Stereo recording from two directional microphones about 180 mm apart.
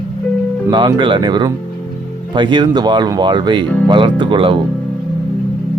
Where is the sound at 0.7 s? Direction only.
25° right (ahead or behind).